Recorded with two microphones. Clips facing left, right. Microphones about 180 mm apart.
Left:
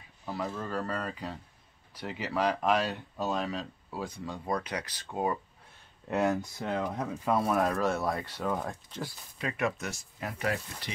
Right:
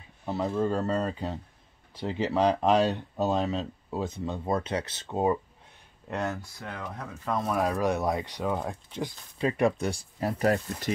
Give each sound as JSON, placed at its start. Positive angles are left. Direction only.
{"t": 0.2, "sound": "speech", "side_deg": -25}
{"t": 6.0, "sound": "speech", "side_deg": 5}
{"t": 6.4, "sound": "speech", "side_deg": 20}
{"t": 7.2, "sound": "speech", "side_deg": 5}
{"t": 7.8, "sound": "speech", "side_deg": -15}
{"t": 9.4, "sound": "speech", "side_deg": -30}